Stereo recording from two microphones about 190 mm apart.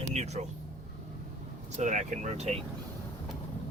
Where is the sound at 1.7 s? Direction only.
40° right (ahead or behind).